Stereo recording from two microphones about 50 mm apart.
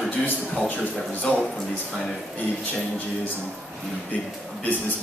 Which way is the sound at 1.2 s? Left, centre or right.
Left.